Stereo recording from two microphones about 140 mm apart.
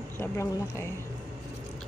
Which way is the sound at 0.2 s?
20° left (ahead or behind).